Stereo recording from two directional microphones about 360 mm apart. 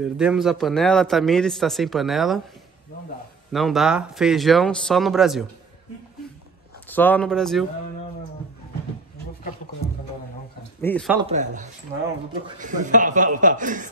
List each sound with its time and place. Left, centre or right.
0.0 s a man's voice: centre
3.5 s a man's voice: centre
6.9 s a man's voice: centre
10.8 s a man's voice: centre
11.1 s a man's voice: centre